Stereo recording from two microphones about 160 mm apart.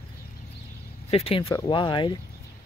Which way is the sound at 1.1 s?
35° left (ahead or behind).